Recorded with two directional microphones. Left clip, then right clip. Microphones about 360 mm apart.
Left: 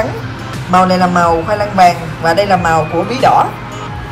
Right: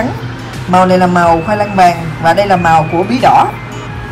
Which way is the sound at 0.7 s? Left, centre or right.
Centre.